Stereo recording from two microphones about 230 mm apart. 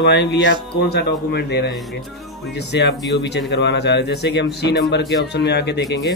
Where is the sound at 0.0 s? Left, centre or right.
Left.